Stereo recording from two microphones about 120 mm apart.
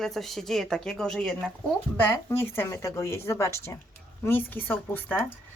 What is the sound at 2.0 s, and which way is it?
Speech, 20° left (ahead or behind).